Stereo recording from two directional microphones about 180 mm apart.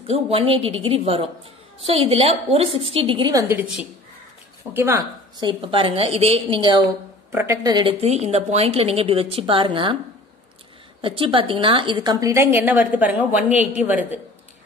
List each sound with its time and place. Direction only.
0.1 s a woman's voice: 30° right (ahead or behind); by 5.0 s 15° right (ahead or behind)
5.4 s a woman's voice: 25° right (ahead or behind)
7.3 s speech: 15° right (ahead or behind)
11.0 s a woman's voice: 30° right (ahead or behind); by 14.2 s 10° right (ahead or behind)